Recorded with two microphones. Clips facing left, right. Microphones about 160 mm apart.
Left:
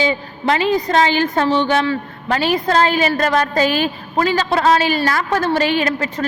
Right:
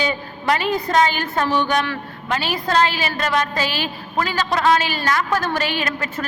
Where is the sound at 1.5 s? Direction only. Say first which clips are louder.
Left 1 dB; 20° left (ahead or behind).